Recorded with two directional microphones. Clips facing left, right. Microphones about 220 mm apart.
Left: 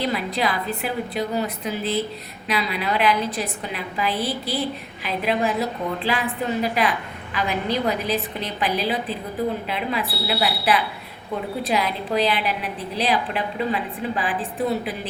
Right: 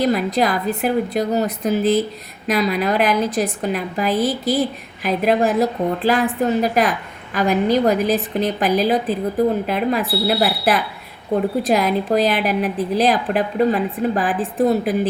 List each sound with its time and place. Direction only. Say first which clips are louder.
0.0 s a woman's voice: right 6 dB; 45° right (ahead or behind)